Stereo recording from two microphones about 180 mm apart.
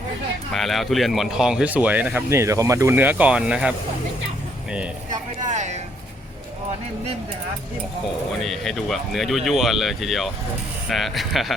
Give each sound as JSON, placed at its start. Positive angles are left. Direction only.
{"t": 0.5, "sound": "speech", "side_deg": 0}
{"t": 5.5, "sound": "speech", "side_deg": -40}
{"t": 8.4, "sound": "speech", "side_deg": 0}